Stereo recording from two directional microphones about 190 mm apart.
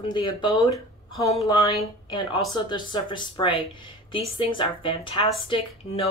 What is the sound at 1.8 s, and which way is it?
Speech, 25° left (ahead or behind).